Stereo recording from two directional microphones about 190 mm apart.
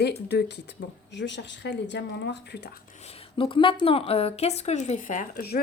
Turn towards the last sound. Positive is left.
turn(degrees=55)  # may be behind; listen again after turning